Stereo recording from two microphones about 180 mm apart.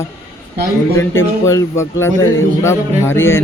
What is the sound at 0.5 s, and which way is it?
Speech, 65° right (ahead or behind).